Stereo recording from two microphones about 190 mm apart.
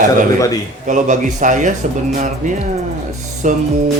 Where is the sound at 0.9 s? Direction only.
40° right (ahead or behind).